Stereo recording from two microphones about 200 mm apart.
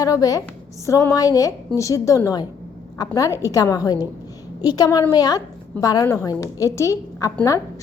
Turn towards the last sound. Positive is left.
turn(degrees=15)  # may be behind; listen again after turning